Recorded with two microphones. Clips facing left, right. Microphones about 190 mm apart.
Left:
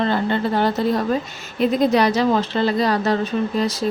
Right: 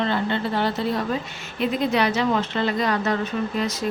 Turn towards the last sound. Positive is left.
turn(degrees=35)  # may be behind; listen again after turning